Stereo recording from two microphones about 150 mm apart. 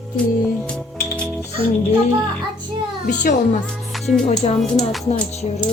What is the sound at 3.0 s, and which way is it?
Speech, 60° left (ahead or behind).